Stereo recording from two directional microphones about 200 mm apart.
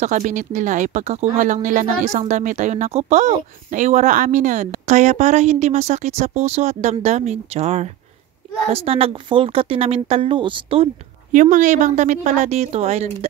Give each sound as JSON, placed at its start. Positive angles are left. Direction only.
{"t": 0.0, "sound": "a woman's voice", "side_deg": -35}
{"t": 11.3, "sound": "speech", "side_deg": -40}